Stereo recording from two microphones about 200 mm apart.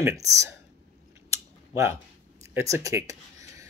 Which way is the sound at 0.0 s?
15° right (ahead or behind).